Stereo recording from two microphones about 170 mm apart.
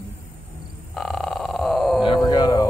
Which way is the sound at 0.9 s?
Centre (ahead or behind).